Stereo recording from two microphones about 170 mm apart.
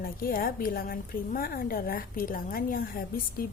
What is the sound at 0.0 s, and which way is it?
A woman's voice, 60° left (ahead or behind).